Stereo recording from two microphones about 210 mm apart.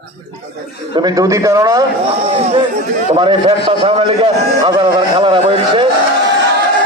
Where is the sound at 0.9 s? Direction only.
20° right (ahead or behind).